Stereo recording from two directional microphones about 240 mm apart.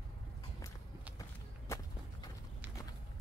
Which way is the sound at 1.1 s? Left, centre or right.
Centre.